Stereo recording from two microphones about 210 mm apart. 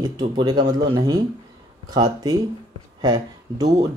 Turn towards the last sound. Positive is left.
turn(degrees=-15)  # may be behind; listen again after turning